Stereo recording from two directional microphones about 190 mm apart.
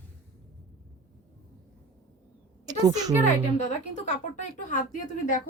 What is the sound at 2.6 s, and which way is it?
Speech, 20° right (ahead or behind).